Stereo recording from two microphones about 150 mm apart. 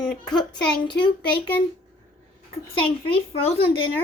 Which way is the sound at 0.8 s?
30° left (ahead or behind).